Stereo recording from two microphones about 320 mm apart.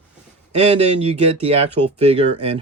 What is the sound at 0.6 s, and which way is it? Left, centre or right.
Speech, centre.